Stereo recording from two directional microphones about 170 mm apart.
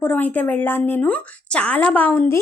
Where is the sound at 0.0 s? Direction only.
10° left (ahead or behind).